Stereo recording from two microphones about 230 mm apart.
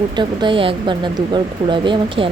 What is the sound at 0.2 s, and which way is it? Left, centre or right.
Speech, right.